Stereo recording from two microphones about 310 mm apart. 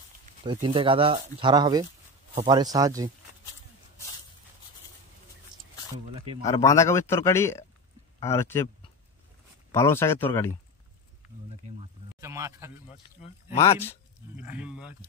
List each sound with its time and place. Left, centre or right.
0.5 s speech: centre
6.4 s a man's voice: centre
11.8 s speech: centre
13.2 s speech: centre
14.3 s speech: centre